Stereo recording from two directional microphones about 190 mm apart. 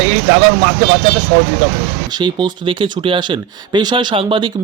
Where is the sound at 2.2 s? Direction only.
25° right (ahead or behind).